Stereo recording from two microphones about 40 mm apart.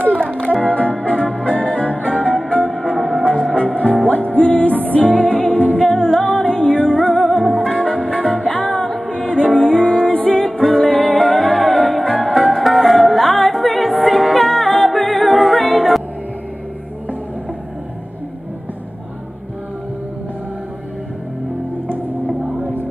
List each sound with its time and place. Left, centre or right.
0.4 s music: left
2.7 s music: centre
3.5 s music: left
6.0 s music: centre
6.4 s music: left
7.4 s music: centre
7.8 s music: left
8.7 s music: centre
9.1 s music: centre
10.3 s music: centre